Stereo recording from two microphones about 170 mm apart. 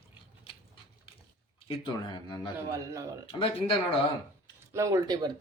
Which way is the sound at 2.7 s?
20° right (ahead or behind).